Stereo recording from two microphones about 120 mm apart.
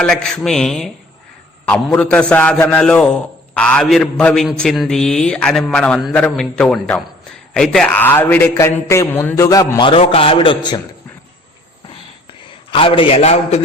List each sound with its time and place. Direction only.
0.0 s a man's voice: 5° left (ahead or behind)
7.9 s a man's voice: 15° left (ahead or behind)
9.8 s a man's voice: 50° left (ahead or behind)
12.7 s a man's voice: 50° left (ahead or behind)